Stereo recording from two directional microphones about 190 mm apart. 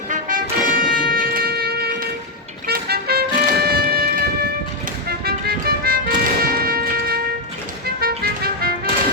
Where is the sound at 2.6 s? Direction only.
55° right (ahead or behind).